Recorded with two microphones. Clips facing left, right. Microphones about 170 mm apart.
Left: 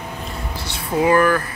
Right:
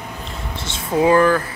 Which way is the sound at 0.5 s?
25° right (ahead or behind).